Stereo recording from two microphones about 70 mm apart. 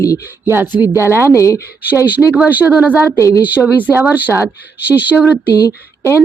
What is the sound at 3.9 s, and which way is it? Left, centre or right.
Speech, right.